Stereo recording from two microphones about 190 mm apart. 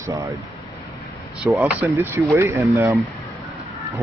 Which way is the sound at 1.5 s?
10° right (ahead or behind).